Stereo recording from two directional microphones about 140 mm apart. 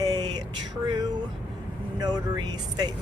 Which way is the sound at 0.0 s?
30° right (ahead or behind).